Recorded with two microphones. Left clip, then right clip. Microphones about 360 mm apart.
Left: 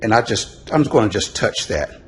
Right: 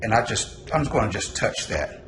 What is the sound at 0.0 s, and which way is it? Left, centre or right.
Speech, centre.